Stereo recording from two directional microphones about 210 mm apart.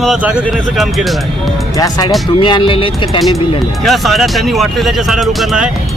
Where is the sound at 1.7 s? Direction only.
15° left (ahead or behind).